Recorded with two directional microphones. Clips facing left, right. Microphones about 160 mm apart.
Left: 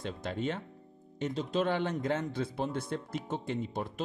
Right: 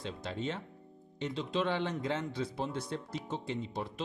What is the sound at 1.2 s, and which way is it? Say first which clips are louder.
A man's voice: left 2 dB; 45° left (ahead or behind).